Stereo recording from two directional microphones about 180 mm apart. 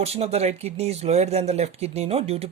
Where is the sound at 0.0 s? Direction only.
35° right (ahead or behind).